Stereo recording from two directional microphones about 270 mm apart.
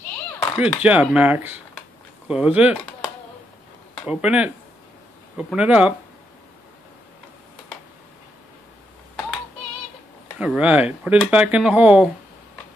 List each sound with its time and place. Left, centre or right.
0.6 s speech: centre
4.1 s speech: centre
5.5 s speech: centre
10.4 s speech: centre